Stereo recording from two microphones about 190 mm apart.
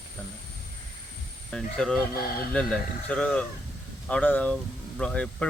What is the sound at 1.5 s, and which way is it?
Speech, 5° left (ahead or behind).